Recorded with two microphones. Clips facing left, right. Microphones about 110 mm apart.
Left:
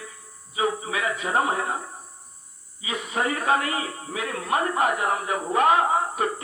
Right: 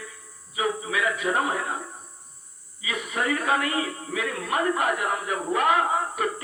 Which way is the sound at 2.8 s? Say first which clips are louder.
Left 1 dB; 25° left (ahead or behind).